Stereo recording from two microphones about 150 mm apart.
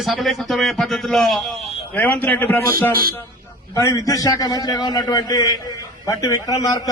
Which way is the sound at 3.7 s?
20° left (ahead or behind).